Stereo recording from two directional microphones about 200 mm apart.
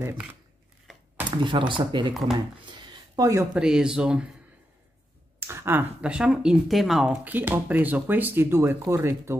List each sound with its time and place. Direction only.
0.0 s speech: 10° right (ahead or behind)
1.3 s speech: 25° right (ahead or behind)
2.3 s a sound: 20° right (ahead or behind)
3.5 s speech: 5° right (ahead or behind)
5.5 s speech: 10° right (ahead or behind)